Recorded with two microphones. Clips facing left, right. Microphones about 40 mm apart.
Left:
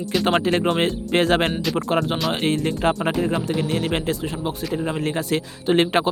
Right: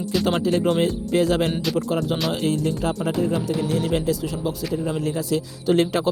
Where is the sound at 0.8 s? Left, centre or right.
Left.